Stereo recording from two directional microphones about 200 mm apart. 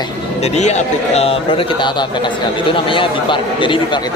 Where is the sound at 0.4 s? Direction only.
35° left (ahead or behind).